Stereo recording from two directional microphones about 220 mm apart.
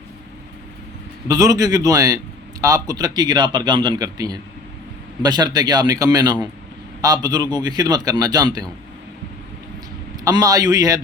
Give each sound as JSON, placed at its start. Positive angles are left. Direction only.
{"t": 1.3, "sound": "a man's voice", "side_deg": -15}
{"t": 10.2, "sound": "a man's voice", "side_deg": -15}